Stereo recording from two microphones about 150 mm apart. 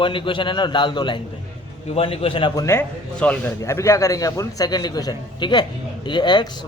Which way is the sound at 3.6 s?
20° left (ahead or behind).